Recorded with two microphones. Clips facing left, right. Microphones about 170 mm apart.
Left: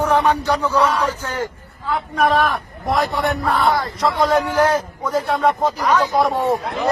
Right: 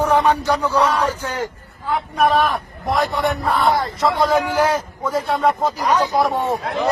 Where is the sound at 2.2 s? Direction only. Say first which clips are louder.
Even; 5° right (ahead or behind).